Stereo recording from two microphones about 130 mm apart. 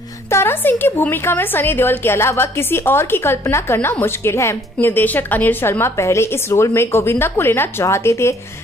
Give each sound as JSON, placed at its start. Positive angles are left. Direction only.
{"t": 0.3, "sound": "a woman's voice", "side_deg": 20}